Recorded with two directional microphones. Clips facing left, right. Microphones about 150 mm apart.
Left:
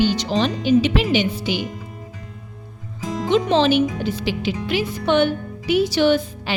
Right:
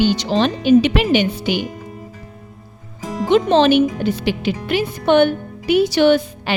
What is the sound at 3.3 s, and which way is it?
A woman's voice, 55° right (ahead or behind).